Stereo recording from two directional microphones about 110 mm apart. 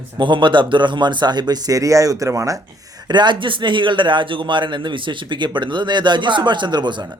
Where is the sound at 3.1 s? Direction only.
45° right (ahead or behind).